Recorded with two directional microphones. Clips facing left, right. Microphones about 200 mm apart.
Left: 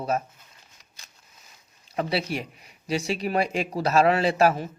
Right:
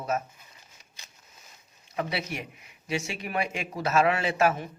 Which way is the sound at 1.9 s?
30° left (ahead or behind).